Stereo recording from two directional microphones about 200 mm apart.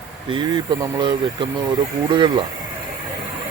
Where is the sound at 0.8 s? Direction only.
20° right (ahead or behind).